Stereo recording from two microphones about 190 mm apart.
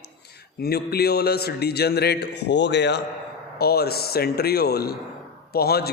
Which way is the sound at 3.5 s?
55° left (ahead or behind).